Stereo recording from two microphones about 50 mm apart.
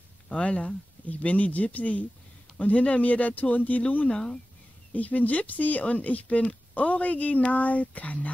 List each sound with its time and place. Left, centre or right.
0.3 s speech: left